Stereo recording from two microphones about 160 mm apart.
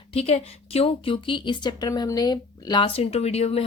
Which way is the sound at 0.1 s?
40° left (ahead or behind).